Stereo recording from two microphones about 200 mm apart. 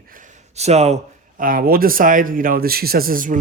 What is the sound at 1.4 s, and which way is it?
A man's voice, 45° right (ahead or behind).